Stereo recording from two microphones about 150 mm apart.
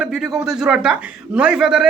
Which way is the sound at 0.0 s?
5° right (ahead or behind).